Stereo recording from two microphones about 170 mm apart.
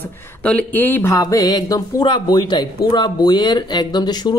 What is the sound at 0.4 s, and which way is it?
Speech, 5° left (ahead or behind).